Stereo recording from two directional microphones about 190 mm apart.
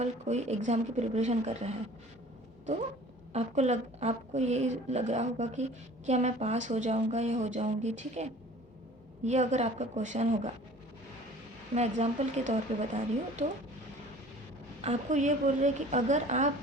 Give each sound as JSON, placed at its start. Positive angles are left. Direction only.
{"t": 0.0, "sound": "a woman's voice", "side_deg": -35}
{"t": 3.3, "sound": "a woman's voice", "side_deg": -35}
{"t": 11.7, "sound": "a woman's voice", "side_deg": -35}
{"t": 14.8, "sound": "a woman's voice", "side_deg": -35}